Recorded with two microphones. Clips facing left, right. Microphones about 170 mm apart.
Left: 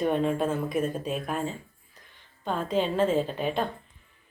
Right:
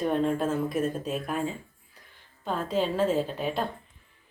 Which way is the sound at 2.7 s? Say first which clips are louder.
Left 1 dB; 5° right (ahead or behind).